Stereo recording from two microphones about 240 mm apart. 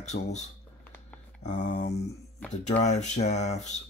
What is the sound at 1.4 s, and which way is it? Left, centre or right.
Mantra, left.